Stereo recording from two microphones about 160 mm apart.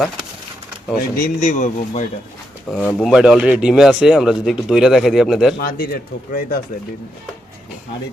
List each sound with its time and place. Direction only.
1.2 s speech: 50° left (ahead or behind)
2.6 s speech: 5° left (ahead or behind)
3.2 s speech: 5° right (ahead or behind)
5.5 s speech: 65° left (ahead or behind)